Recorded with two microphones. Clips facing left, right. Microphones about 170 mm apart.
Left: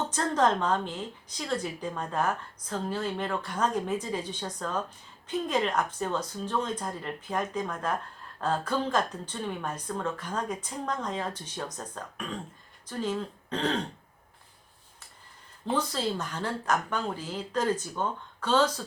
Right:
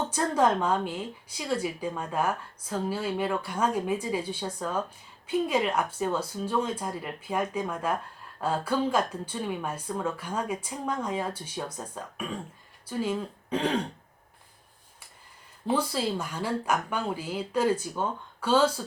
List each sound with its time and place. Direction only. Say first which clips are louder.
0.1 s a woman's voice: right 1 dB; 10° right (ahead or behind)
15.6 s a woman's voice: right 2 dB; 10° right (ahead or behind)